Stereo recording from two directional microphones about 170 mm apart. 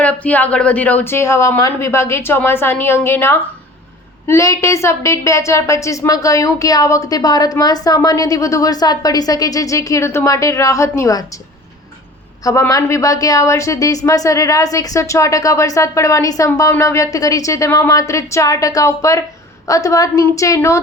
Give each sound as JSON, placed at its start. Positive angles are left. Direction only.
{"t": 0.0, "sound": "a woman's voice", "side_deg": 10}
{"t": 12.5, "sound": "a woman's voice", "side_deg": 20}